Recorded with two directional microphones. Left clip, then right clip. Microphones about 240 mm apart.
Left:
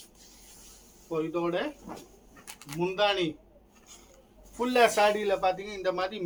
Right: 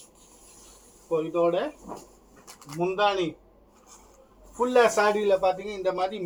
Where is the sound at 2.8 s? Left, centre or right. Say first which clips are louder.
Right 2 dB; left.